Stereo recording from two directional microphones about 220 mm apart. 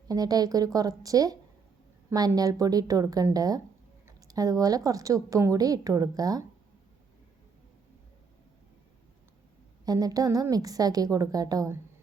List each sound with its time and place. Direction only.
0.1 s a woman's voice: 15° right (ahead or behind)
9.8 s a woman's voice: 15° right (ahead or behind)